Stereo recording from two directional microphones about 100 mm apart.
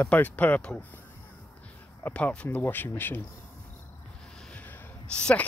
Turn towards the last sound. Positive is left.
turn(degrees=10)  # may be behind; listen again after turning